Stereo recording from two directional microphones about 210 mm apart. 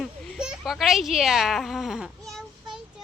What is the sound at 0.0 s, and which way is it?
Speech, 5° right (ahead or behind).